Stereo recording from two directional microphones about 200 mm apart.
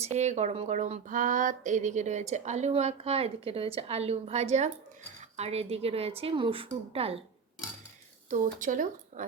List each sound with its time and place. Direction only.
0.0 s a woman's voice: 35° right (ahead or behind)
8.3 s a woman's voice: 40° right (ahead or behind)